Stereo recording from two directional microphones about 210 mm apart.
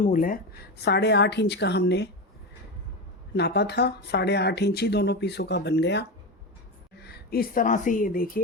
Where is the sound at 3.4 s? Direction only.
50° left (ahead or behind).